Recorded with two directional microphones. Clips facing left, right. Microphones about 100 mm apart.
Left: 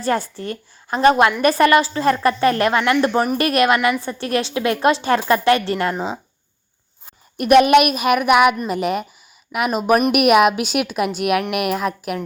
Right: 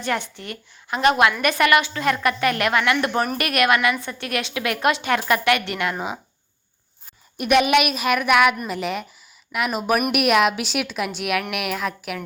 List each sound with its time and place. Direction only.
0.0 s a woman's voice: 35° left (ahead or behind)
7.3 s a woman's voice: 45° left (ahead or behind)